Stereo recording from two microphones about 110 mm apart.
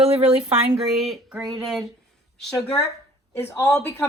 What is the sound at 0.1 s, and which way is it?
Speech, 65° right (ahead or behind).